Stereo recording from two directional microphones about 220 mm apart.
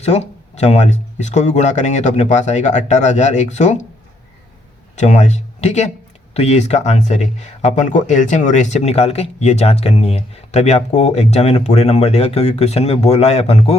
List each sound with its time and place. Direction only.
0.0 s speech: 30° left (ahead or behind)
4.9 s speech: 30° left (ahead or behind)